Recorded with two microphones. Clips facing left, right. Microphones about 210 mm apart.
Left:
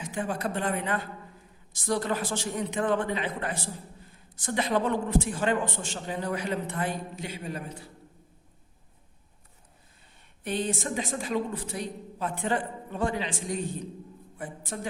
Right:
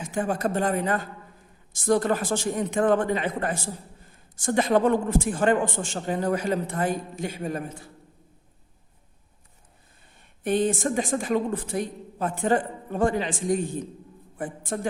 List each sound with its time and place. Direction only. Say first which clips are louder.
0.0 s a woman's voice: right 5 dB; 50° right (ahead or behind)
10.4 s a woman's voice: right 7 dB; 50° right (ahead or behind)